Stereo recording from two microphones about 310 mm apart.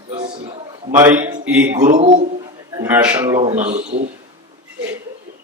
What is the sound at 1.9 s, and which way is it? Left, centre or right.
Speech, right.